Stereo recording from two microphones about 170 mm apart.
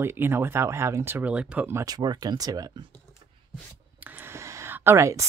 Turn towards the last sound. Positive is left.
turn(degrees=-15)  # may be behind; listen again after turning